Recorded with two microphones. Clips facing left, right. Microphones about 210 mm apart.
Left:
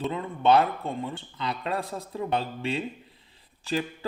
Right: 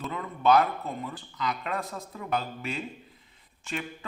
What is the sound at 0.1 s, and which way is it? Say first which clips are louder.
Speech: even; 30° left (ahead or behind).